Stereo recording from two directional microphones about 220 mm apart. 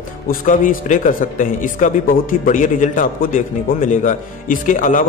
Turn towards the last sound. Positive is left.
turn(degrees=35)  # may be behind; listen again after turning